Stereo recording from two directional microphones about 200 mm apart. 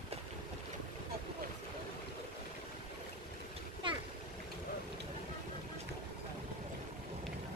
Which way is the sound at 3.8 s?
25° right (ahead or behind).